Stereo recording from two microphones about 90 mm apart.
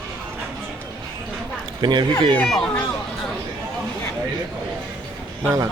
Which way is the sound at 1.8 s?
55° right (ahead or behind).